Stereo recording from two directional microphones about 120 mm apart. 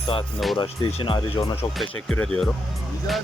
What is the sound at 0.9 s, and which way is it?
Speech, 50° left (ahead or behind).